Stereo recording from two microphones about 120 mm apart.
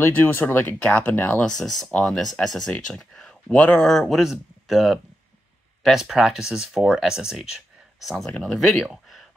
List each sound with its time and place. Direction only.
0.0 s speech: 15° left (ahead or behind)
1.4 s speech: 5° left (ahead or behind)
8.3 s speech: 10° left (ahead or behind)